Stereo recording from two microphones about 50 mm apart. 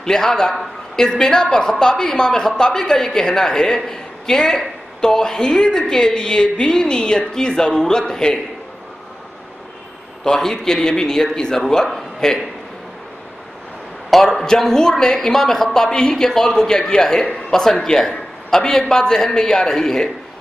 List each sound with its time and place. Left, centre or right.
0.0 s a woman's voice: centre
10.2 s a woman's voice: centre
14.1 s a woman's voice: centre